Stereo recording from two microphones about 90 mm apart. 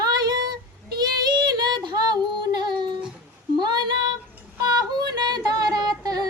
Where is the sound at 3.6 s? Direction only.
55° right (ahead or behind).